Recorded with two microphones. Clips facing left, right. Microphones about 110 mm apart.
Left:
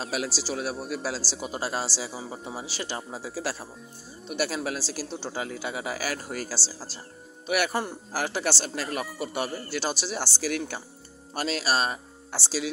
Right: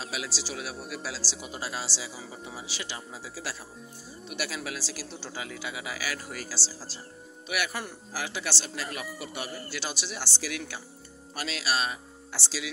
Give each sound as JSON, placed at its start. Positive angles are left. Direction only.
{"t": 0.0, "sound": "speech", "side_deg": 45}